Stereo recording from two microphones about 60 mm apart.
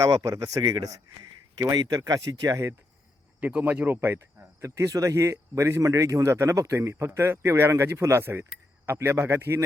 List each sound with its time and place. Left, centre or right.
0.0 s speech: right
3.4 s speech: right
4.9 s speech: right
5.1 s a man's voice: right
5.8 s speech: right
6.2 s a man's voice: right
8.2 s a man's voice: right